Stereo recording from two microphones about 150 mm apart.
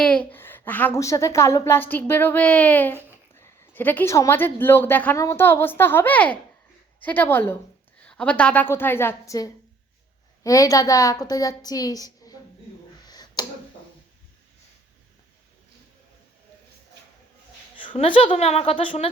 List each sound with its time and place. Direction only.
0.0 s a woman's voice: 5° left (ahead or behind); by 12.4 s 25° left (ahead or behind)
13.1 s clicking: 25° left (ahead or behind)
17.7 s a woman's voice: 35° left (ahead or behind)